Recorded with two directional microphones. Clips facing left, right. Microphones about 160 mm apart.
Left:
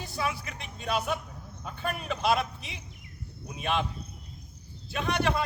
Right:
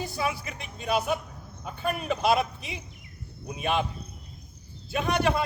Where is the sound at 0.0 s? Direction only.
10° right (ahead or behind).